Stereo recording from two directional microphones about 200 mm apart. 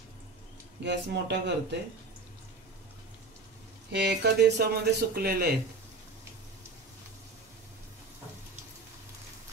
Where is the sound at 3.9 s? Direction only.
55° right (ahead or behind).